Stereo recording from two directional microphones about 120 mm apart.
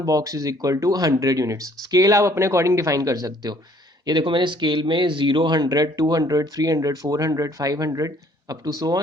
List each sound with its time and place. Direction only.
0.0 s speech: 30° right (ahead or behind)